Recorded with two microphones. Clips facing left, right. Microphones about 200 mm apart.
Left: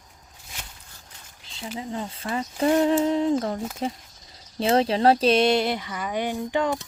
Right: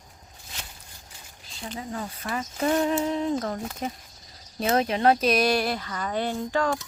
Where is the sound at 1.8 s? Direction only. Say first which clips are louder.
Left 2 dB; 25° left (ahead or behind).